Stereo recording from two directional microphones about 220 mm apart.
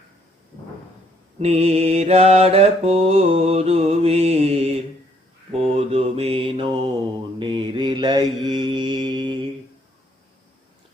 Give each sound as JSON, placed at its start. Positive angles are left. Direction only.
{"t": 1.4, "sound": "mantra", "side_deg": -30}